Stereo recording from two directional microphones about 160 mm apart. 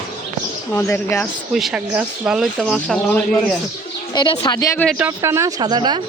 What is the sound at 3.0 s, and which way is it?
Speech, 10° left (ahead or behind).